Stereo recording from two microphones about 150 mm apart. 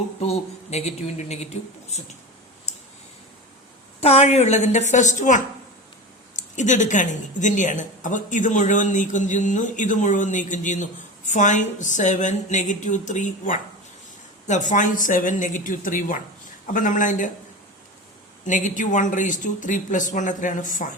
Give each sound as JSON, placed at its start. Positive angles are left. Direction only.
{"t": 0.2, "sound": "a woman's voice", "side_deg": 45}
{"t": 4.0, "sound": "a woman's voice", "side_deg": 45}
{"t": 18.4, "sound": "a woman's voice", "side_deg": 55}